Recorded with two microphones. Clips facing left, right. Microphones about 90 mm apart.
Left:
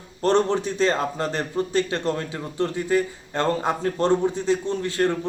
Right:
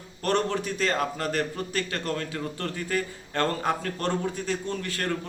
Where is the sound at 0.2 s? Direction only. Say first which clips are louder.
Left 6 dB; 25° left (ahead or behind).